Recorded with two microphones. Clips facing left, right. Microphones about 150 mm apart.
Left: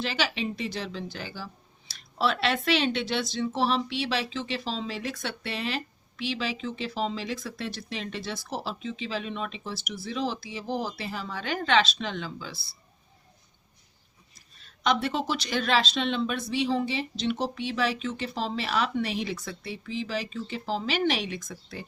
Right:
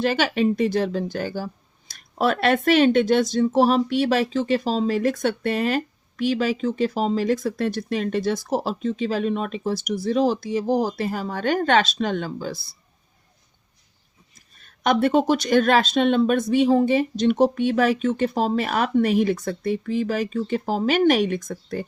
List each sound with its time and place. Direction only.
0.0 s speech: 50° right (ahead or behind)
14.3 s speech: 50° right (ahead or behind)